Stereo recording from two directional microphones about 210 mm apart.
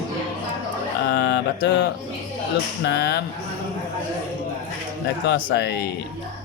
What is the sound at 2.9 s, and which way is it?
Mantra, 55° left (ahead or behind).